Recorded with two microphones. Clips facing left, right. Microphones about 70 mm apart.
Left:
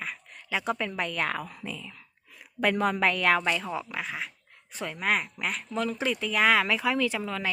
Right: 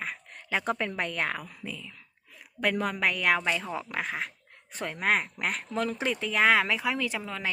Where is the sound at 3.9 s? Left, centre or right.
Right.